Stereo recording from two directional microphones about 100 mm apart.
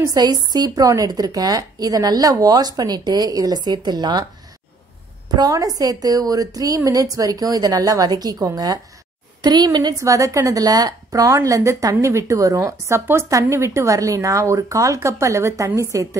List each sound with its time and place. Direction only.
0.0 s a woman's voice: 40° right (ahead or behind)
5.3 s a woman's voice: 40° right (ahead or behind)